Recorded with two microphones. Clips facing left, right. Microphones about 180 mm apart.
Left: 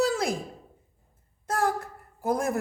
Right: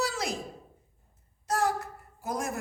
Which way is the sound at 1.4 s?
55° left (ahead or behind).